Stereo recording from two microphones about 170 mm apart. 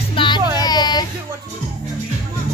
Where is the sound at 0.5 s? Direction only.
25° left (ahead or behind).